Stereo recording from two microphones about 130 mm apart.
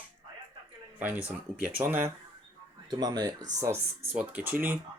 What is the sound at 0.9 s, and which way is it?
Speech, 15° right (ahead or behind).